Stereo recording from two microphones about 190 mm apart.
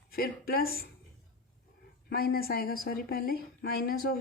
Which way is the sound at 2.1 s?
50° left (ahead or behind).